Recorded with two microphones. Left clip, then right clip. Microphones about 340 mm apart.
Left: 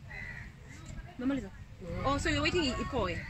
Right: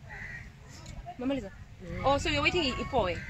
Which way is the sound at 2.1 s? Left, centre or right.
Centre.